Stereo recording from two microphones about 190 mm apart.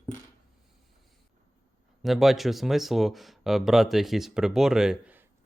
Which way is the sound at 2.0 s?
Centre (ahead or behind).